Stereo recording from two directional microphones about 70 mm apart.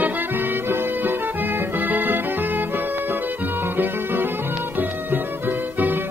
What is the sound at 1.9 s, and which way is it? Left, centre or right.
Music, right.